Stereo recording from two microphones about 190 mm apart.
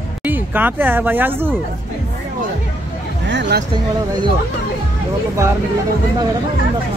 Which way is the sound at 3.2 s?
65° right (ahead or behind).